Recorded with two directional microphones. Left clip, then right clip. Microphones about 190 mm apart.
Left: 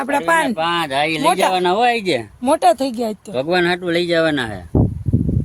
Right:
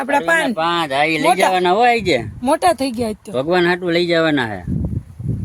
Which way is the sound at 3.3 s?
30° right (ahead or behind).